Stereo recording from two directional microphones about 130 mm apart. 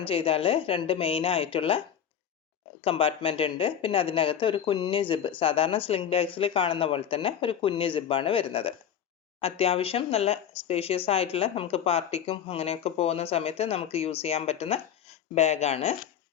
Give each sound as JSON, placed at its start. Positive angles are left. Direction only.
{"t": 0.0, "sound": "speech", "side_deg": 45}
{"t": 2.8, "sound": "speech", "side_deg": 50}